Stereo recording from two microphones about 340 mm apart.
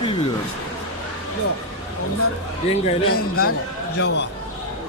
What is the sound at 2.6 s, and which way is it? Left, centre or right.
Speech, centre.